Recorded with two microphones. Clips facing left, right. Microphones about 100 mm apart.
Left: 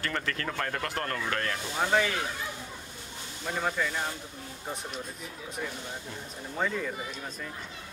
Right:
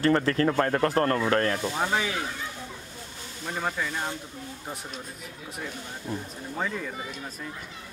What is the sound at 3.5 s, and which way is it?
Speech, 5° right (ahead or behind).